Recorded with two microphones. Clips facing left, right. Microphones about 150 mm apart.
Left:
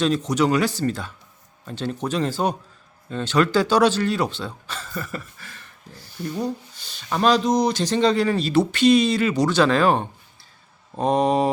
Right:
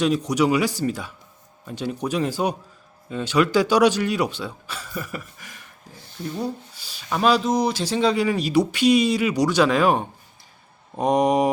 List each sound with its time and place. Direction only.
0.0 s speech: 10° right (ahead or behind)